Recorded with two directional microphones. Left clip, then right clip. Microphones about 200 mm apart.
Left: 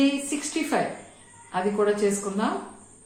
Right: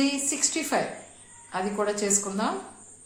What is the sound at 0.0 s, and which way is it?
A woman's voice, 40° right (ahead or behind).